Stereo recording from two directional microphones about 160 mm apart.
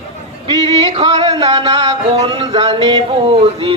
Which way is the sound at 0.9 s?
40° right (ahead or behind).